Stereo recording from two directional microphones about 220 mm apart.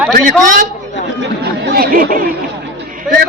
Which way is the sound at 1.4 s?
40° right (ahead or behind).